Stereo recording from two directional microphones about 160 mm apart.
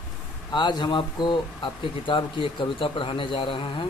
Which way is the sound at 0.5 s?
30° left (ahead or behind).